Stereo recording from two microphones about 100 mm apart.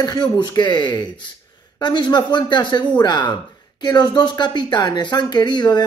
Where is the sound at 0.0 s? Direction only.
45° left (ahead or behind).